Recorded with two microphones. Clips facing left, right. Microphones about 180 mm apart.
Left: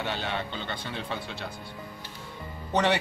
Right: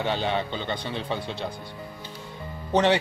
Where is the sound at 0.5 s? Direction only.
20° right (ahead or behind).